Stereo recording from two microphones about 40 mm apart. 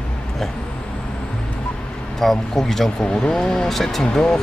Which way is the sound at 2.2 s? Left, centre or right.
Centre.